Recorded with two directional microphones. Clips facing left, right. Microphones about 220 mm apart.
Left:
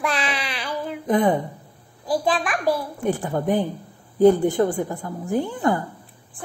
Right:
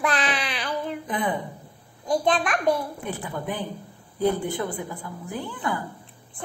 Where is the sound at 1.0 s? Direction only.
45° left (ahead or behind).